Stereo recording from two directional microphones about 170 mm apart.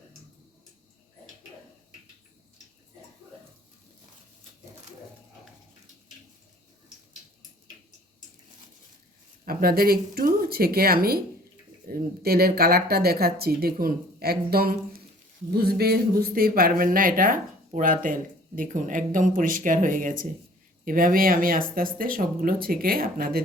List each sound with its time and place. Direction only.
9.4 s speech: 60° right (ahead or behind)